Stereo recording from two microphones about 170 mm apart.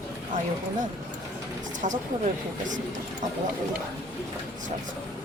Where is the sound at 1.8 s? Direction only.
45° right (ahead or behind).